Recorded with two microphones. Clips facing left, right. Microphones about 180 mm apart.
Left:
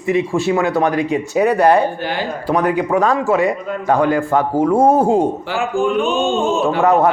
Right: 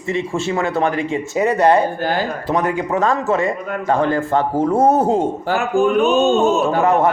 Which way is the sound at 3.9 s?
10° left (ahead or behind).